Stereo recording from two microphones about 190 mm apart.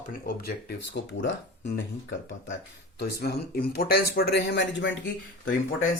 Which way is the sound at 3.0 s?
55° left (ahead or behind).